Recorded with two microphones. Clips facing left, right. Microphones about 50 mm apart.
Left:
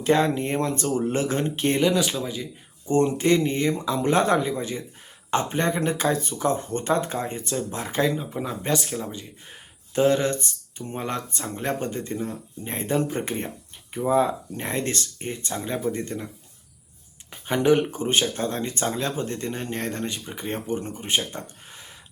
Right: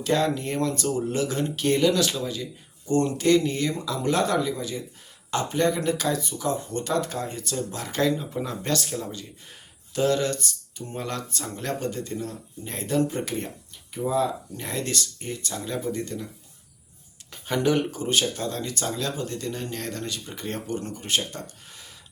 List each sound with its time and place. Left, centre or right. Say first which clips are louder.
0.0 s speech: left 3 dB; left
17.3 s speech: left 3 dB; left